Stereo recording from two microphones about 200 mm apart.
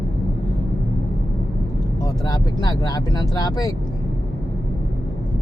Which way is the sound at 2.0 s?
20° left (ahead or behind).